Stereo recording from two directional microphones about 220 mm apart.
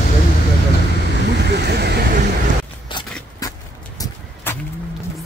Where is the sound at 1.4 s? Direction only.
50° right (ahead or behind).